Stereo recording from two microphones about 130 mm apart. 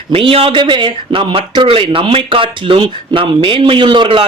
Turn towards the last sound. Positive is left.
turn(degrees=-40)  # may be behind; listen again after turning